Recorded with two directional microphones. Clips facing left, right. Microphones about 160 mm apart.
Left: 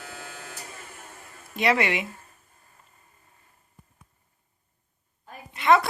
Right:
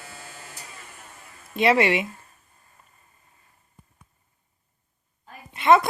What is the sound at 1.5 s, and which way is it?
Speech, 25° right (ahead or behind).